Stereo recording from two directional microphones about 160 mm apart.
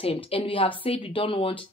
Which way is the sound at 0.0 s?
35° left (ahead or behind).